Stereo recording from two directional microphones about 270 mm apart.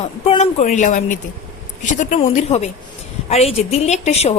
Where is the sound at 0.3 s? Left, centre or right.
Left.